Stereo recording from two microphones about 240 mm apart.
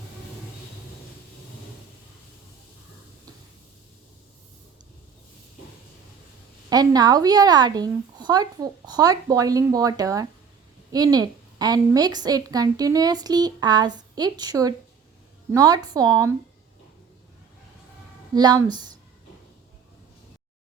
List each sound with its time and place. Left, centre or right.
6.7 s a woman's voice: centre
18.3 s a woman's voice: centre